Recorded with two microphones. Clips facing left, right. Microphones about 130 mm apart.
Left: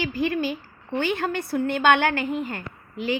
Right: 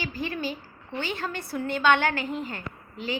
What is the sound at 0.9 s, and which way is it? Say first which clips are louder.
A woman's voice: left 7 dB; 55° left (ahead or behind).